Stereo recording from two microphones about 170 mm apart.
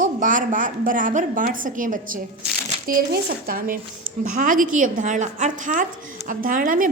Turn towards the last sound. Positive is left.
turn(degrees=-50)  # may be behind; listen again after turning